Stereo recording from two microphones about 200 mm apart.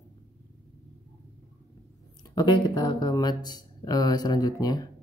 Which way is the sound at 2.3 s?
20° left (ahead or behind).